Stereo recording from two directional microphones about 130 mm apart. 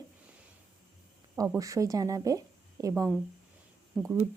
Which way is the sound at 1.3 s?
20° right (ahead or behind).